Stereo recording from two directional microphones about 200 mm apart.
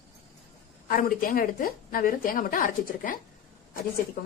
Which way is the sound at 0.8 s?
45° left (ahead or behind).